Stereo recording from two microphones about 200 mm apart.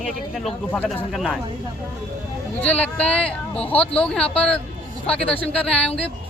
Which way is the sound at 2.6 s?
5° left (ahead or behind).